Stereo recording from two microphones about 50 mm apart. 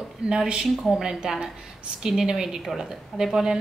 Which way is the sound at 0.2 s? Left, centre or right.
Centre.